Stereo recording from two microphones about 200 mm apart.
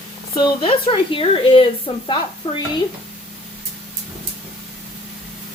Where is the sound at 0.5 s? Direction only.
25° left (ahead or behind).